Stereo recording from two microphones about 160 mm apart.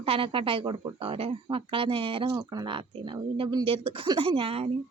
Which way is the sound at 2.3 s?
25° right (ahead or behind).